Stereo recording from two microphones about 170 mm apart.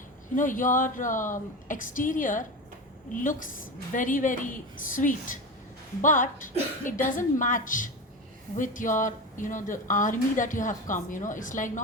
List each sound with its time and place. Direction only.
0.3 s a woman's voice: 50° left (ahead or behind)